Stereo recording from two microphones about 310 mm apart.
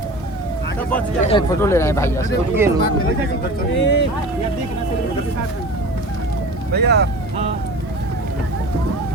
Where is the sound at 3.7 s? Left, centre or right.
Left.